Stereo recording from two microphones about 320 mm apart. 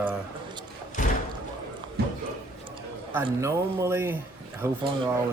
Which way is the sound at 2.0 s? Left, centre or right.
Right.